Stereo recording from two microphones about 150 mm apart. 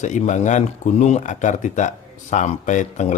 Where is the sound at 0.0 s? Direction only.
55° left (ahead or behind).